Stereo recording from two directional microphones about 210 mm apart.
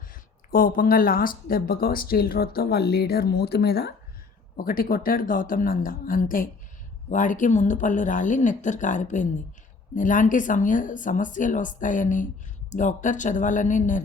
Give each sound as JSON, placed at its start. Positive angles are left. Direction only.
{"t": 0.1, "sound": "speech", "side_deg": 40}